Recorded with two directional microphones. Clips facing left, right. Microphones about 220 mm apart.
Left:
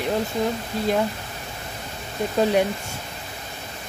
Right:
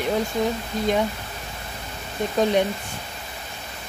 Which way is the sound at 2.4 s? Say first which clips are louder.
Left 1 dB; 5° left (ahead or behind).